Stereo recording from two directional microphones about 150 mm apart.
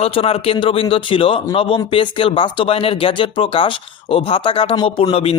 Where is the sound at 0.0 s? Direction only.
40° left (ahead or behind).